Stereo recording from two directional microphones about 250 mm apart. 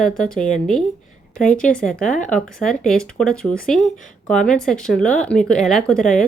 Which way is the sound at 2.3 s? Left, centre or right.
Centre.